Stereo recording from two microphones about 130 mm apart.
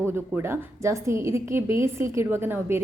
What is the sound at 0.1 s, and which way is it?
A woman's voice, 20° right (ahead or behind).